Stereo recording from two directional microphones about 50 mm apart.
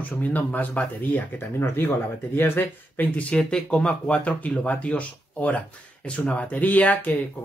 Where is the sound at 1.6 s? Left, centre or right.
Left.